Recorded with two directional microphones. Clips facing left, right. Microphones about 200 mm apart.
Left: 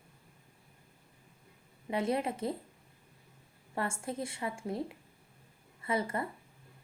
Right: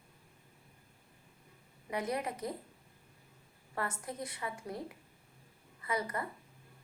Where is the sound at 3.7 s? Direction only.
25° left (ahead or behind).